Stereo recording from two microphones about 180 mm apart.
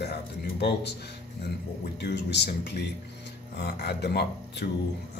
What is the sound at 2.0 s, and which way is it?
Speech, 70° left (ahead or behind).